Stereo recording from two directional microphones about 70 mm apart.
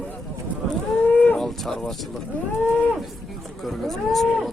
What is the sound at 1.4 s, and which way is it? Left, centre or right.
Speech, centre.